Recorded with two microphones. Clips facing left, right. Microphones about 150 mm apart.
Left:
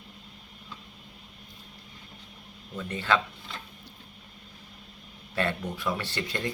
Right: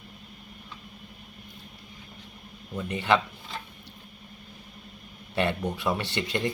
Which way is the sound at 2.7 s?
15° right (ahead or behind).